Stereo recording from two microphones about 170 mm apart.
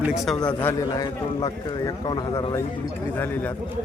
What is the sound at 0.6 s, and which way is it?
A man's voice, 20° left (ahead or behind).